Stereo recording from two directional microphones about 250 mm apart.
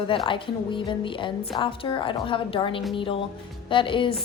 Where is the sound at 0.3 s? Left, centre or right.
Centre.